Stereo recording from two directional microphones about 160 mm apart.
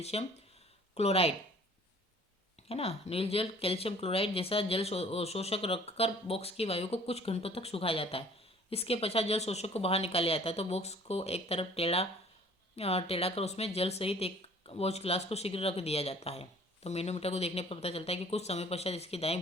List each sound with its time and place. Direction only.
0.0 s speech: 40° left (ahead or behind)
2.6 s speech: 40° left (ahead or behind)